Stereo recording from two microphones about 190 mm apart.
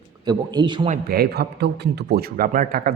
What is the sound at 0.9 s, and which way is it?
A man's voice, 55° right (ahead or behind).